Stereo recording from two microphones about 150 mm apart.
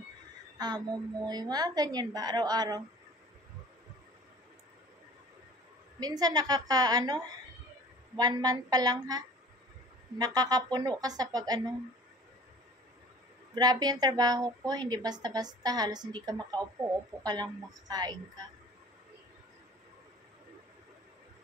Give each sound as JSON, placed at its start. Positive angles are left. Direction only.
{"t": 0.6, "sound": "a woman's voice", "side_deg": -30}
{"t": 5.9, "sound": "a woman's voice", "side_deg": -25}
{"t": 8.2, "sound": "a woman's voice", "side_deg": -25}
{"t": 13.6, "sound": "a woman's voice", "side_deg": -25}